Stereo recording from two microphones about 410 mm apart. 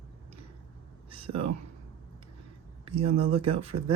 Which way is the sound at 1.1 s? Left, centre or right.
Centre.